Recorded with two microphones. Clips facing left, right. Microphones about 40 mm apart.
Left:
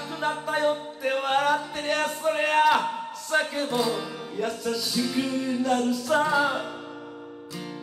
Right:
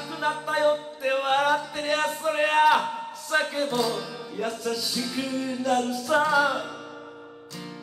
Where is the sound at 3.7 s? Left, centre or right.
Centre.